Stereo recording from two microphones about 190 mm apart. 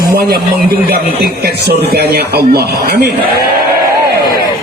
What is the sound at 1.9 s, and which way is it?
A man's voice, 55° right (ahead or behind).